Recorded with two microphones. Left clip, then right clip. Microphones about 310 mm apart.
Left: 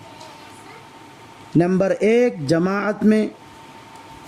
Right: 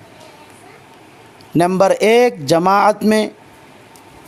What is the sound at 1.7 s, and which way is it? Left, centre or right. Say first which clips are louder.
Speech: right 7 dB; centre.